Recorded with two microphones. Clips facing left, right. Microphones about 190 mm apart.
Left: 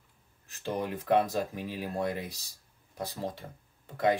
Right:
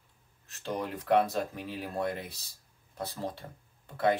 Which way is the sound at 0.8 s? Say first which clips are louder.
Right 1 dB; 15° left (ahead or behind).